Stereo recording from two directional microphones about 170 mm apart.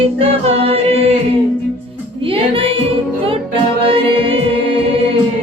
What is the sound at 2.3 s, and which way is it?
Music, 35° right (ahead or behind).